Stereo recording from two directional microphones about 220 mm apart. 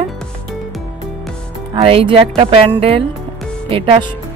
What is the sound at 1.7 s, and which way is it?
Speech, 25° right (ahead or behind).